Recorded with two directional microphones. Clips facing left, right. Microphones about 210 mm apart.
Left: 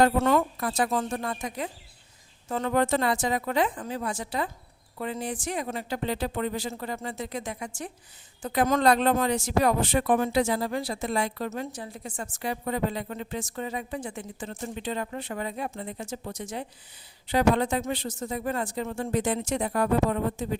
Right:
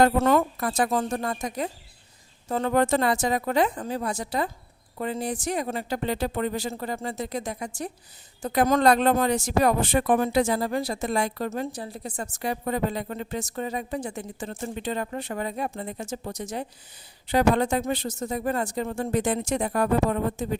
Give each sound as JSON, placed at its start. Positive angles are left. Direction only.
{"t": 0.0, "sound": "a woman's voice", "side_deg": -45}